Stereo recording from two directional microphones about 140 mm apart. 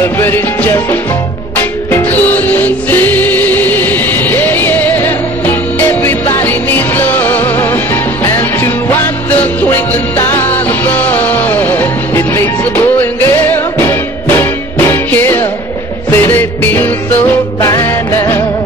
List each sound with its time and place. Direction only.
0.2 s music: 15° left (ahead or behind)